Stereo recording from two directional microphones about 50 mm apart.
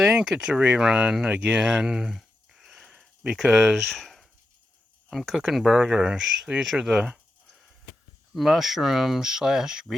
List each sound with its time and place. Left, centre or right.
0.0 s speech: centre
0.5 s speech: right
1.3 s a sound: right
3.8 s speech: centre
5.1 s speech: centre
8.3 s speech: centre